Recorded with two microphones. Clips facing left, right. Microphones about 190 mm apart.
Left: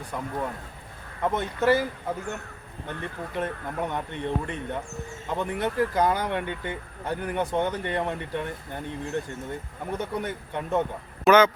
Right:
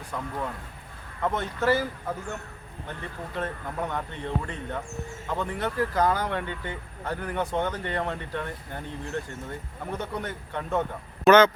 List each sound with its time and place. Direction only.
0.1 s speech: 15° left (ahead or behind)
3.3 s speech: 15° left (ahead or behind)